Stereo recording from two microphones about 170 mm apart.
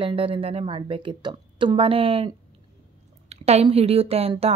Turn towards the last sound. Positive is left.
turn(degrees=-35)  # may be behind; listen again after turning